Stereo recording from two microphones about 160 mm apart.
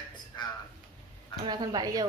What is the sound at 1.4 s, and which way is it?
Speech, 25° right (ahead or behind).